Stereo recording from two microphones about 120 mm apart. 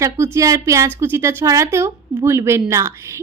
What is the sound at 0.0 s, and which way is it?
A woman's voice, 25° right (ahead or behind).